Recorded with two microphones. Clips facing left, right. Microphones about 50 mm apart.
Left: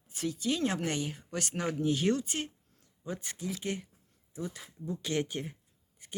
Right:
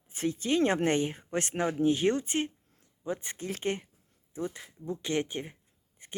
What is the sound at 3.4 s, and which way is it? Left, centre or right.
Speech, right.